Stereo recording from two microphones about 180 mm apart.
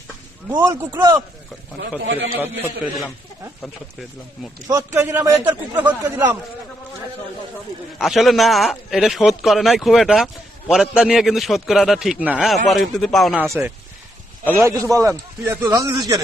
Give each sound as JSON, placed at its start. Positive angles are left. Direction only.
{"t": 0.5, "sound": "a man's voice", "side_deg": -15}
{"t": 2.3, "sound": "a man's voice", "side_deg": -10}
{"t": 4.7, "sound": "a man's voice", "side_deg": -15}
{"t": 7.9, "sound": "a man's voice", "side_deg": 0}
{"t": 13.4, "sound": "a man's voice", "side_deg": -15}